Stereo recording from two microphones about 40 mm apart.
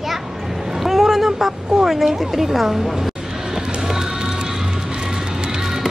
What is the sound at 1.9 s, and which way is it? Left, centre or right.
Speech, centre.